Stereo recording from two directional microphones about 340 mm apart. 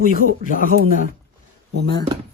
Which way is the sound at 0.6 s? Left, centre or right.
Right.